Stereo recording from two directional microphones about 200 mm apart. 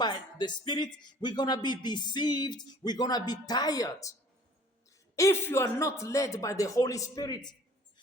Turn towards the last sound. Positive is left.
turn(degrees=20)  # may be behind; listen again after turning